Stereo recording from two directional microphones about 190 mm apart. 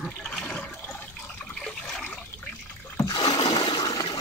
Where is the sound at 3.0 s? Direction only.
20° left (ahead or behind).